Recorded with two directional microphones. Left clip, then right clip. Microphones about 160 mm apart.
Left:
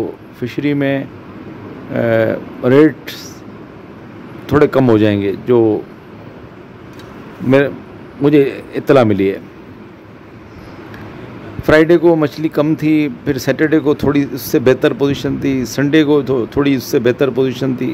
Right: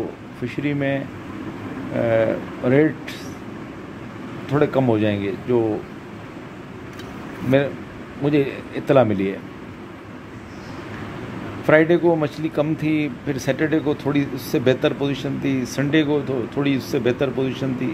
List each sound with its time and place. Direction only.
0.6 s speech: 30° left (ahead or behind)
4.5 s speech: 40° left (ahead or behind)
8.2 s speech: 35° left (ahead or behind)
11.6 s speech: 30° left (ahead or behind)